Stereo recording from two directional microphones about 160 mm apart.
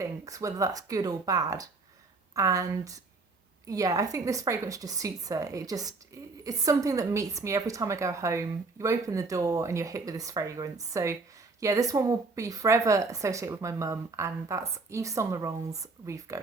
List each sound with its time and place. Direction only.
0.0 s a woman's voice: 20° right (ahead or behind)